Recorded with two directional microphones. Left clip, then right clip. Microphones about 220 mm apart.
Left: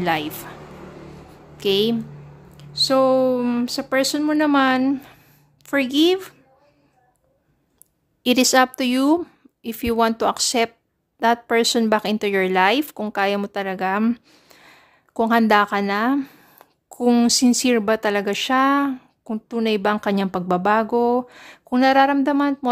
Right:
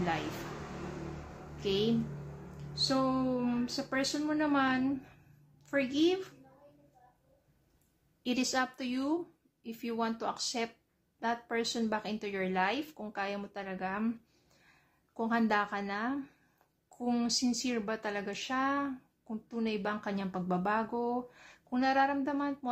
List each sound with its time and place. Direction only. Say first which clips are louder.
1.6 s a woman's voice: left 12 dB; 50° left (ahead or behind)
8.2 s speech: left 17 dB; 50° left (ahead or behind)